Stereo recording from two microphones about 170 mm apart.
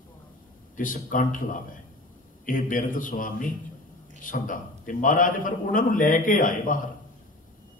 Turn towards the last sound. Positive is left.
turn(degrees=50)  # may be behind; listen again after turning